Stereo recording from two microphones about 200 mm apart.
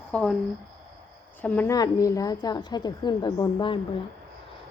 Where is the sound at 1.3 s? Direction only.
10° left (ahead or behind); by 3.8 s 25° left (ahead or behind).